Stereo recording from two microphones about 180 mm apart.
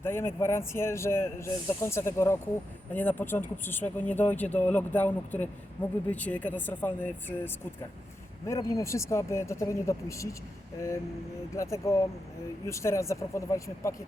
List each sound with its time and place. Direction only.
0.0 s speech: 15° left (ahead or behind)
11.5 s speech: 15° left (ahead or behind)